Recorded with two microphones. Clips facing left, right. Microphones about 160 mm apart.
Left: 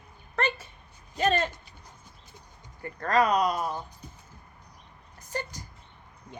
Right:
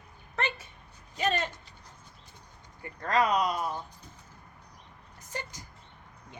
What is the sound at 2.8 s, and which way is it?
Speech, 45° left (ahead or behind).